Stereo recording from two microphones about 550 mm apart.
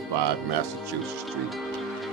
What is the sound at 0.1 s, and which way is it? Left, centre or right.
Speech, right.